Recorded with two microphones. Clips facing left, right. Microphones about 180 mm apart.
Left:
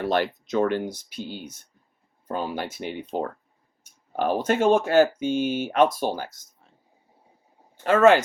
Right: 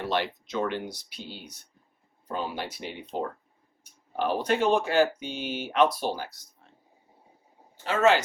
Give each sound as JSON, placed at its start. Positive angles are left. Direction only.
{"t": 0.1, "sound": "speech", "side_deg": 45}
{"t": 7.9, "sound": "speech", "side_deg": 50}